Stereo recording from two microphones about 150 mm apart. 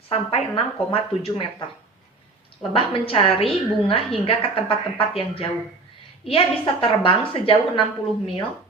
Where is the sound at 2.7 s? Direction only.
40° left (ahead or behind).